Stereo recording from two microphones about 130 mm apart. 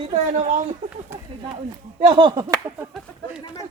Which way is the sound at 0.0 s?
60° right (ahead or behind).